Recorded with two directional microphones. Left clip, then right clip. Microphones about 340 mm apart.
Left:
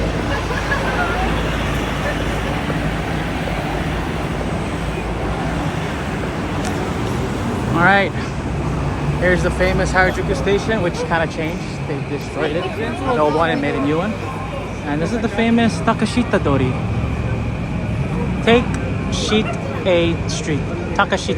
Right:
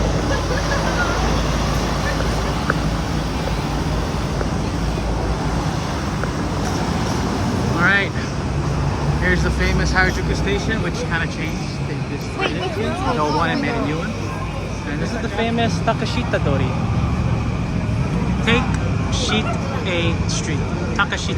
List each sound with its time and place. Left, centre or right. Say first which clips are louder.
7.8 s vehicle: left 3 dB; centre
9.2 s speech: left 5 dB; centre
13.1 s speech: left 5 dB; centre
15.4 s speech: left 2 dB; centre
18.5 s speech: left 5 dB; centre
19.9 s speech: left 7 dB; centre